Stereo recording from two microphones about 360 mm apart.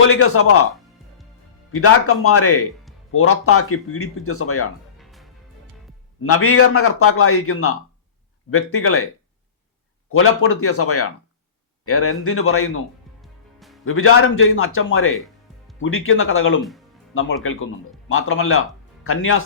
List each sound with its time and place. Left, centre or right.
0.0 s speech: left
1.7 s speech: left
4.9 s music: centre
6.2 s speech: left
10.1 s speech: left
13.2 s music: centre
13.8 s speech: left